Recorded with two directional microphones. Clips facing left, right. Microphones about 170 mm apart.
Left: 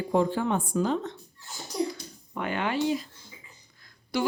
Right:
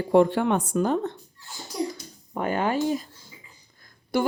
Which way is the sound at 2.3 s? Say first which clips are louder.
Right 4 dB; 45° right (ahead or behind).